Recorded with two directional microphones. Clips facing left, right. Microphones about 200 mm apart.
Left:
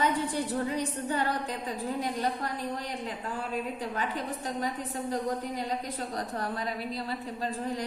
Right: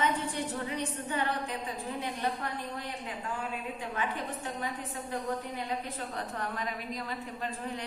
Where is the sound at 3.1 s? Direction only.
35° left (ahead or behind).